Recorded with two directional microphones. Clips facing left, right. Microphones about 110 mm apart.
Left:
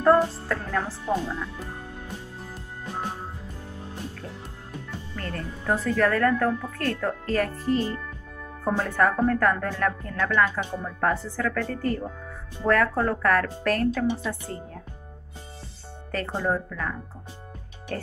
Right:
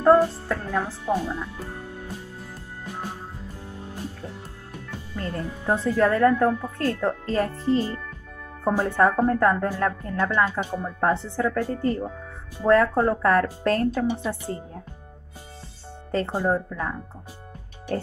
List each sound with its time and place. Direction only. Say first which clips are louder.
0.0 s speech: right 2 dB; 15° right (ahead or behind)
5.1 s a woman's voice: right 4 dB; 15° right (ahead or behind)
16.1 s a woman's voice: right 3 dB; 20° right (ahead or behind)